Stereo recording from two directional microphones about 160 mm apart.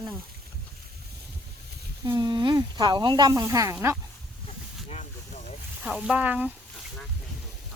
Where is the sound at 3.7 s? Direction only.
10° right (ahead or behind).